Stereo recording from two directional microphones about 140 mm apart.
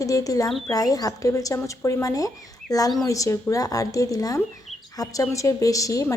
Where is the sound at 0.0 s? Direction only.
25° left (ahead or behind).